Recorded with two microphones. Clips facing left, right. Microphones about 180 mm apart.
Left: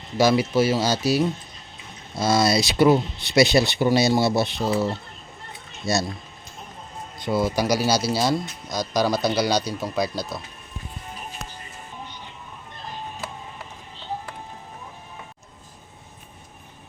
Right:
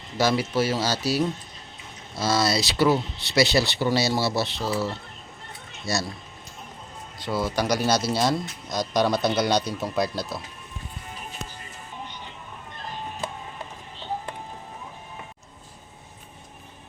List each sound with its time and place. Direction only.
0.2 s speech: 10° left (ahead or behind)
7.2 s speech: 15° left (ahead or behind); by 10.4 s centre (ahead or behind)